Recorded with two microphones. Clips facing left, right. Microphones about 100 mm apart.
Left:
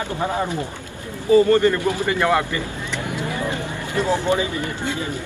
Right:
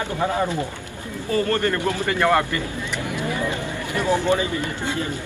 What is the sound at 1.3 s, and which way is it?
Speech, 15° left (ahead or behind).